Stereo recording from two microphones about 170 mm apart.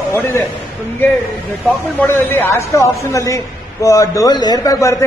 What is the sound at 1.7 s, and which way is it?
A man's voice, 10° left (ahead or behind).